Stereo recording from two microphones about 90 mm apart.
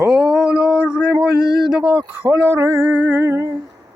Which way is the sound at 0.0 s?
5° right (ahead or behind).